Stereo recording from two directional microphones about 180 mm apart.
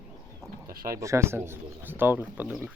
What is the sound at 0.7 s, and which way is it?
Speech, 55° right (ahead or behind).